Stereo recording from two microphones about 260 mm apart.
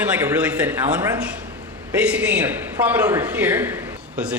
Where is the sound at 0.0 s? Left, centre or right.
Centre.